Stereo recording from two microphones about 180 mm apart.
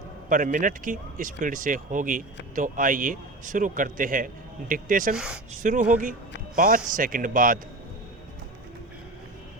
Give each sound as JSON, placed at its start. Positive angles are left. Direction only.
{"t": 0.3, "sound": "speech", "side_deg": -45}
{"t": 5.1, "sound": "speech", "side_deg": -5}
{"t": 5.6, "sound": "speech", "side_deg": -45}